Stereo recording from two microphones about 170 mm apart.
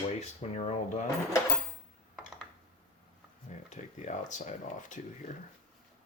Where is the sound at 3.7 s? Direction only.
45° left (ahead or behind).